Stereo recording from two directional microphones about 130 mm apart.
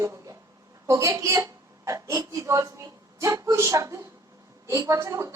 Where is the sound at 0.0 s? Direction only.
25° right (ahead or behind).